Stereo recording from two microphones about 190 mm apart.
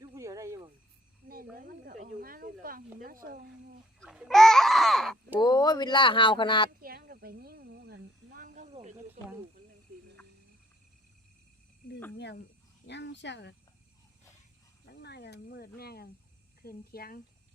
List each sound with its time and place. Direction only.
0.0 s snake: 20° right (ahead or behind)
1.2 s cricket: 45° right (ahead or behind)
1.6 s speech: 45° right (ahead or behind)
4.0 s speech: centre (ahead or behind)
5.4 s speech: 20° left (ahead or behind)
6.7 s cricket: 50° right (ahead or behind)
12.1 s speech: 65° left (ahead or behind)
15.0 s speech: 60° left (ahead or behind)